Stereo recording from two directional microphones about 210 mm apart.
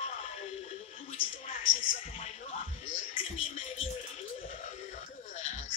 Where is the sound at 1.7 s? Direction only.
35° left (ahead or behind).